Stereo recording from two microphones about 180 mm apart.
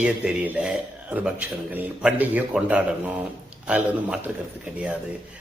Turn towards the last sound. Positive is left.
turn(degrees=-10)  # may be behind; listen again after turning